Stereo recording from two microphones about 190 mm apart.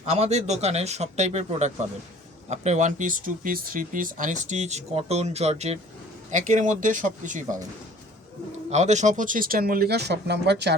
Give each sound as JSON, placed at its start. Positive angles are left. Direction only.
{"t": 0.0, "sound": "speech", "side_deg": -35}
{"t": 8.7, "sound": "speech", "side_deg": -35}